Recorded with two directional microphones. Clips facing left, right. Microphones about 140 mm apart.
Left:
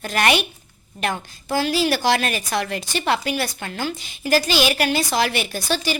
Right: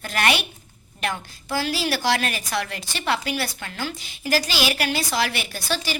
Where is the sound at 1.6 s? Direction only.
20° left (ahead or behind).